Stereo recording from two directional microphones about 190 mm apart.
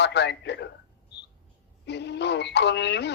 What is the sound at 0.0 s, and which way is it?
Speech, 65° left (ahead or behind).